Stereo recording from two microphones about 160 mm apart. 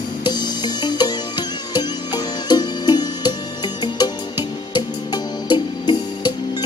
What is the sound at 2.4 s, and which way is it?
Music, 25° left (ahead or behind).